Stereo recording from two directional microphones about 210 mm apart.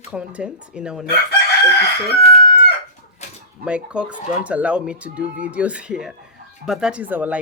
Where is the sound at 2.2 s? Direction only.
30° left (ahead or behind).